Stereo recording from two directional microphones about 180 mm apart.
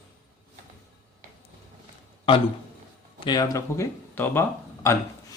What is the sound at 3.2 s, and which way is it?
Speech, 20° left (ahead or behind).